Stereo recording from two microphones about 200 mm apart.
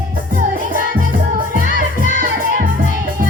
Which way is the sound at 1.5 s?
40° right (ahead or behind).